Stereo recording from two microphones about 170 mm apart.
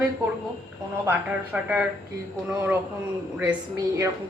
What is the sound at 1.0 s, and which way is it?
A woman's voice, 15° right (ahead or behind).